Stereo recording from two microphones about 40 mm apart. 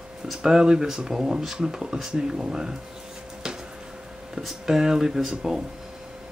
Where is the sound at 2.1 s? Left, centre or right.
Centre.